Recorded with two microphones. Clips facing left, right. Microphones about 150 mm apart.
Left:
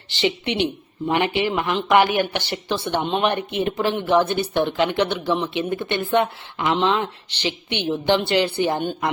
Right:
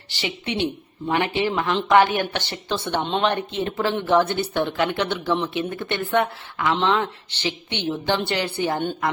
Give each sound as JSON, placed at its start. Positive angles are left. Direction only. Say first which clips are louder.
{"t": 0.1, "sound": "speech", "louder": "left 5 dB", "side_deg": 20}